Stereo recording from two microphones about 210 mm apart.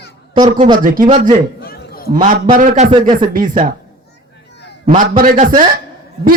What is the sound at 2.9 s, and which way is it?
Speech, 20° right (ahead or behind).